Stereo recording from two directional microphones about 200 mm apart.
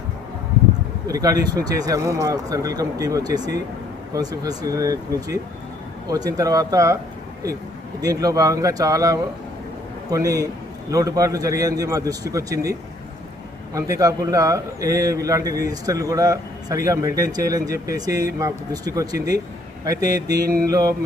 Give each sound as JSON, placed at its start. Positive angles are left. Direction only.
{"t": 1.0, "sound": "a man's voice", "side_deg": -15}
{"t": 8.0, "sound": "a man's voice", "side_deg": -15}
{"t": 13.7, "sound": "a man's voice", "side_deg": -15}